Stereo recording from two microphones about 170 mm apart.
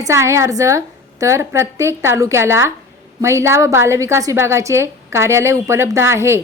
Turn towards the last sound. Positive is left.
turn(degrees=-15)  # may be behind; listen again after turning